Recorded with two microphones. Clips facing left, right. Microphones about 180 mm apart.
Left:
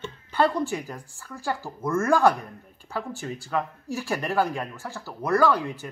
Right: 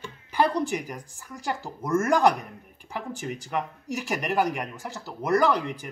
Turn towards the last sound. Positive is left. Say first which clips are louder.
# left 1 dB
turn(degrees=-15)  # may be behind; listen again after turning